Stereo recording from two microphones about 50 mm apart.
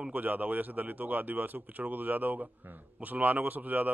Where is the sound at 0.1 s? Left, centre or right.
Right.